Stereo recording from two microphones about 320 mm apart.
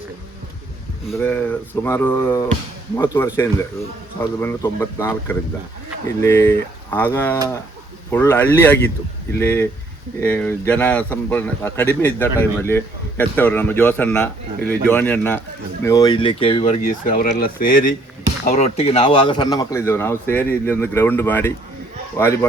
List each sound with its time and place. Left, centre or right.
1.0 s a man's voice: centre